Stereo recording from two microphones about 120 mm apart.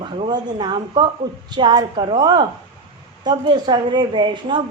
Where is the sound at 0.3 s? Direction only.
40° right (ahead or behind).